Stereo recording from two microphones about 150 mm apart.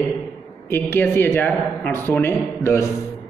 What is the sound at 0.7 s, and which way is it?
Speech, 15° left (ahead or behind).